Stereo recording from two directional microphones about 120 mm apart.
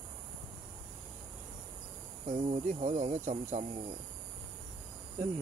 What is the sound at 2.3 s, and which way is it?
Speech, 65° right (ahead or behind).